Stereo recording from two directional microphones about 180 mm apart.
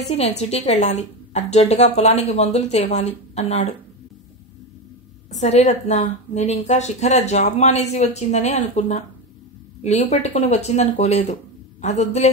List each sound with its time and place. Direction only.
0.4 s a woman's voice: 40° left (ahead or behind)
5.3 s a woman's voice: 40° left (ahead or behind)